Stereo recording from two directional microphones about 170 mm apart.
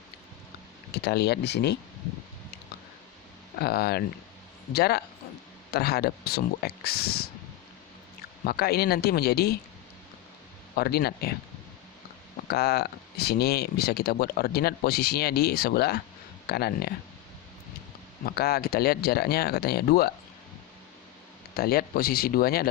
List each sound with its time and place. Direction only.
1.0 s speech: 70° left (ahead or behind)
3.6 s speech: 65° left (ahead or behind)
8.4 s speech: 65° left (ahead or behind)
10.8 s speech: 65° left (ahead or behind)
12.5 s speech: 65° left (ahead or behind)
18.3 s speech: 65° left (ahead or behind)
21.5 s speech: 60° left (ahead or behind)